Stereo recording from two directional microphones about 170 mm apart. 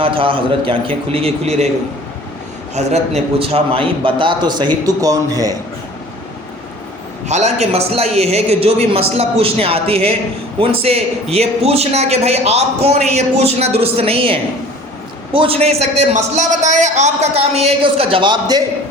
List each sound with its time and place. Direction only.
0.0 s a man's voice: 30° right (ahead or behind)
2.7 s a man's voice: 40° right (ahead or behind); by 5.5 s 20° right (ahead or behind)
7.3 s a man's voice: 40° right (ahead or behind); by 18.6 s 25° right (ahead or behind)